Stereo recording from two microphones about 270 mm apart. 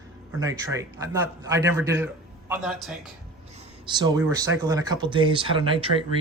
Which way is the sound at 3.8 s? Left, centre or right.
Centre.